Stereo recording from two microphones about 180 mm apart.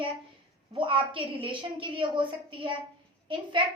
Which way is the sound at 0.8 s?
30° right (ahead or behind).